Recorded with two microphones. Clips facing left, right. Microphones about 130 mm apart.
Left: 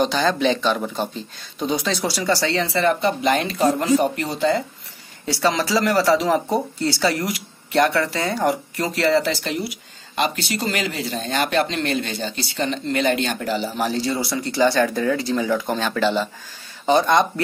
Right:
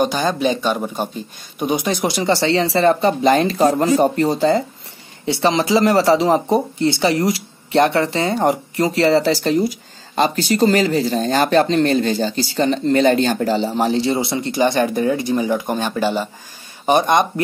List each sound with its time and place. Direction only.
0.0 s speech: 15° right (ahead or behind); by 4.6 s 35° right (ahead or behind)
5.2 s speech: 25° right (ahead or behind)